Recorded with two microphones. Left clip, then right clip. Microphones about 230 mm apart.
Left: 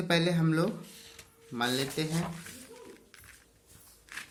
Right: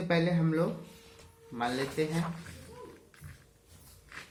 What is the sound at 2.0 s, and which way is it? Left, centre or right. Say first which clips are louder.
Speech: right 3 dB; left.